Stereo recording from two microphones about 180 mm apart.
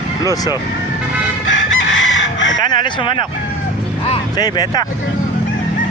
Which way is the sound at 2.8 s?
30° left (ahead or behind).